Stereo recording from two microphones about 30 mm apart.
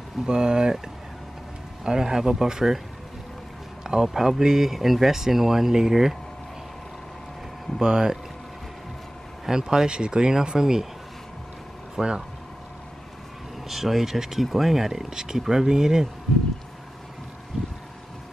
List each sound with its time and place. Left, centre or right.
0.2 s speech: right
1.9 s speech: right
3.8 s speech: right
4.7 s speech: centre
7.8 s speech: right
9.5 s speech: right
12.0 s speech: right
13.7 s speech: centre
15.0 s speech: right